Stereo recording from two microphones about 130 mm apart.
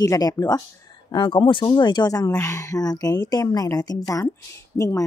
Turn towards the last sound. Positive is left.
turn(degrees=25)  # may be behind; listen again after turning